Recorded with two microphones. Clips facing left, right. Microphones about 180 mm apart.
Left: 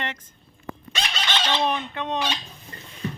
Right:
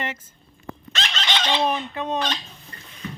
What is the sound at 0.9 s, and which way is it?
Chicken, 10° left (ahead or behind).